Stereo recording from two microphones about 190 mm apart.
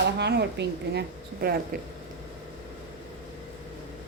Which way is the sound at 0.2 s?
60° right (ahead or behind).